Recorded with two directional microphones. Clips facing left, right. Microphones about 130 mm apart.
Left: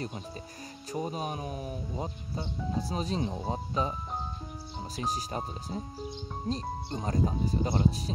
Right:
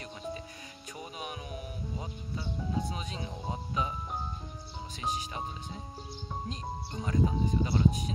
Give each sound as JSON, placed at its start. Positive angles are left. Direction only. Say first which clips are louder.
{"t": 0.0, "sound": "speech", "louder": "left 1 dB", "side_deg": 35}
{"t": 4.9, "sound": "speech", "louder": "left 2 dB", "side_deg": 40}